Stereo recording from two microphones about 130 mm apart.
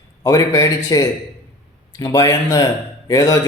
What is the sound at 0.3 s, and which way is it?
A man's voice, 25° left (ahead or behind).